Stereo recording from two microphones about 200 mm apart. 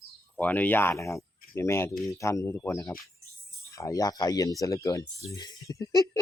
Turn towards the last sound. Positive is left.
turn(degrees=15)  # may be behind; listen again after turning